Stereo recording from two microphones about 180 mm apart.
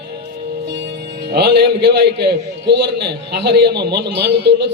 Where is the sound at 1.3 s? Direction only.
65° right (ahead or behind).